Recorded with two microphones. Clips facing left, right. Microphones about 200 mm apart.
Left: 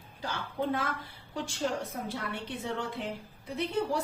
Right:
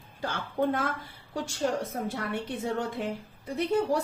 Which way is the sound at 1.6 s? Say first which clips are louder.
Right 4 dB; 50° right (ahead or behind).